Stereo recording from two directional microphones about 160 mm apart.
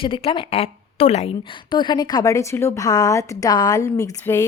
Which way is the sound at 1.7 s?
25° left (ahead or behind).